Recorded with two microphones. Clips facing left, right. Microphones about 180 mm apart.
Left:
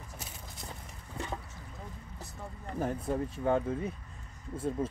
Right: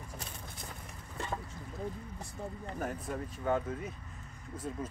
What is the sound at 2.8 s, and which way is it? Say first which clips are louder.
Speech: left 6 dB; 25° left (ahead or behind).